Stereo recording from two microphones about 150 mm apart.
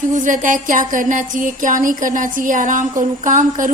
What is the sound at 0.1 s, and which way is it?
A woman's voice, 60° right (ahead or behind).